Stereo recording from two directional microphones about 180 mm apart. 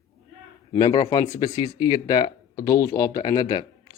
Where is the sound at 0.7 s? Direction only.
25° left (ahead or behind).